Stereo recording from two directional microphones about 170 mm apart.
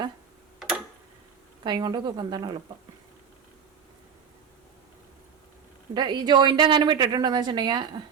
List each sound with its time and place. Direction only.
1.6 s a woman's voice: 25° right (ahead or behind)
5.9 s a woman's voice: 25° right (ahead or behind)